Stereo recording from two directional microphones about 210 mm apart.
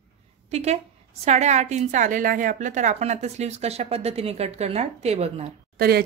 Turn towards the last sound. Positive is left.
turn(degrees=-45)  # may be behind; listen again after turning